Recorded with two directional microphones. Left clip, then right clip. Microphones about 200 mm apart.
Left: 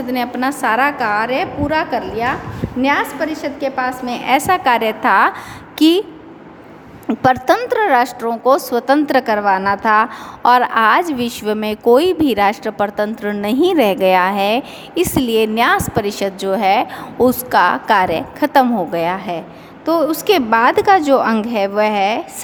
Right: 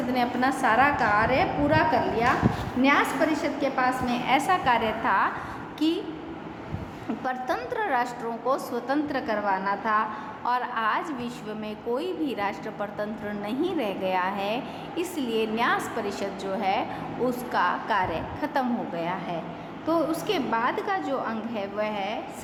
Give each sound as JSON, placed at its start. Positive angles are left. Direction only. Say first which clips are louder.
{"t": 0.1, "sound": "a woman's voice", "louder": "left 6 dB", "side_deg": 55}
{"t": 7.1, "sound": "a woman's voice", "louder": "left 16 dB", "side_deg": 50}